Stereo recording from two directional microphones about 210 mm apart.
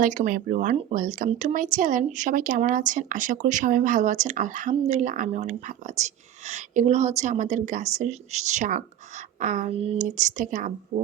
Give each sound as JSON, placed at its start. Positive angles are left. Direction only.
{"t": 0.0, "sound": "speech", "side_deg": -35}